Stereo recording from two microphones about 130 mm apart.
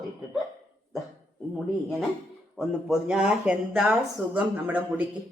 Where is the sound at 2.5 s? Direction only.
5° right (ahead or behind).